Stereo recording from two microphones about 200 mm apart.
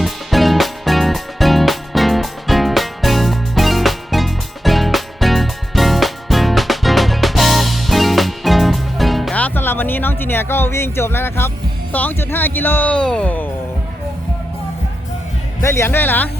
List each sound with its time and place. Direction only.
0.0 s music: centre (ahead or behind)
15.6 s speech: 15° left (ahead or behind)